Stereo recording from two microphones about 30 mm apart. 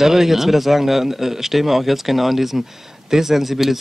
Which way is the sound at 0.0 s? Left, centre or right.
Centre.